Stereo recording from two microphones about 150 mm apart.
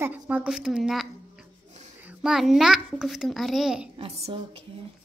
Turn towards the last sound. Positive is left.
turn(degrees=-40)  # may be behind; listen again after turning